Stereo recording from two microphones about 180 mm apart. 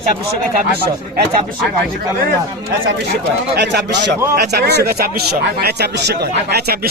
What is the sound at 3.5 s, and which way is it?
Speech, 70° right (ahead or behind).